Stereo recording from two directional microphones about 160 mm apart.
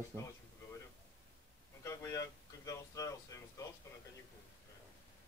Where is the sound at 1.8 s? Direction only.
20° left (ahead or behind).